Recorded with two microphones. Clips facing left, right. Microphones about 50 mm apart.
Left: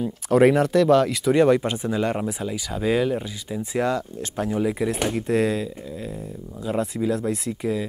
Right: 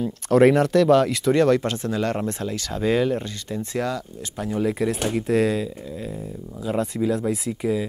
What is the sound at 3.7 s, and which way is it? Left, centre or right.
Speech, left.